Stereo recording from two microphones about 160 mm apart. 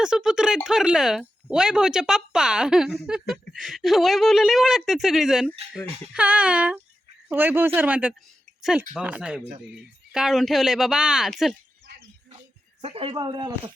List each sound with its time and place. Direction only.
0.0 s speech: 5° right (ahead or behind)
12.8 s speech: 35° right (ahead or behind)